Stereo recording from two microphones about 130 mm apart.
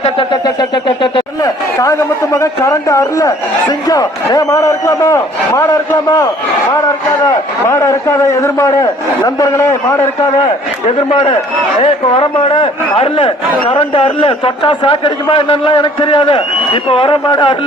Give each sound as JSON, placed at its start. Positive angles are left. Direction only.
{"t": 0.0, "sound": "a man's voice", "side_deg": 40}
{"t": 1.4, "sound": "a man's voice", "side_deg": 25}
{"t": 10.0, "sound": "a man's voice", "side_deg": 45}